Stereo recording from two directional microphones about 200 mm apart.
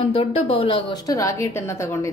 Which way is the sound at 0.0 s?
30° left (ahead or behind).